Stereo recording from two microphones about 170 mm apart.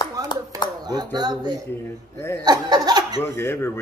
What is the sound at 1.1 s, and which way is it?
Speech, 25° right (ahead or behind).